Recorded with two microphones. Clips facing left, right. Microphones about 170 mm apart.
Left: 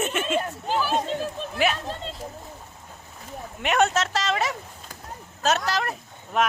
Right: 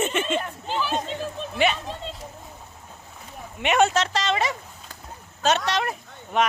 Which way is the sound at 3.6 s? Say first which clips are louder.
Right 2 dB; centre (ahead or behind).